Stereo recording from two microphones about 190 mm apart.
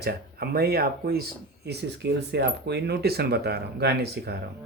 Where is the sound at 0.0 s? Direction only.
55° right (ahead or behind).